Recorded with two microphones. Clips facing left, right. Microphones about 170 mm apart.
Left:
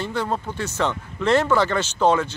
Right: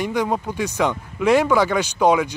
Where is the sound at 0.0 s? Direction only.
15° right (ahead or behind).